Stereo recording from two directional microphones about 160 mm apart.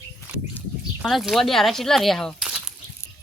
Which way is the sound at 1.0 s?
Centre (ahead or behind).